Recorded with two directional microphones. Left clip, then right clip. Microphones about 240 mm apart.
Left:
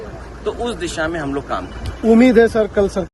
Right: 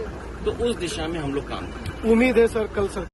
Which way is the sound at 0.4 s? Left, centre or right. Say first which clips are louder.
Left 2 dB; left.